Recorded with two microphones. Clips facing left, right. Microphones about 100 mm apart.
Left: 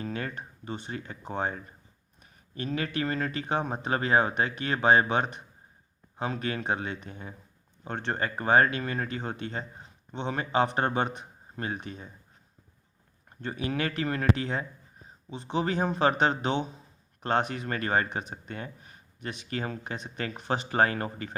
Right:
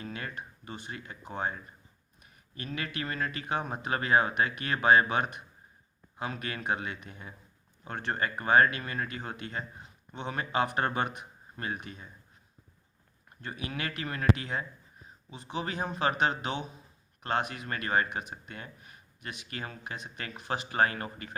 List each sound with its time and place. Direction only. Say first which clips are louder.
0.0 s speech: left 5 dB; 35° left (ahead or behind)
13.4 s speech: left 6 dB; 30° left (ahead or behind)